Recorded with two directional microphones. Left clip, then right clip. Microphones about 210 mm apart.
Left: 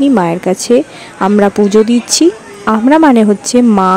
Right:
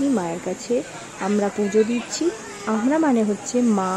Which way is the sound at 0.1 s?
50° left (ahead or behind).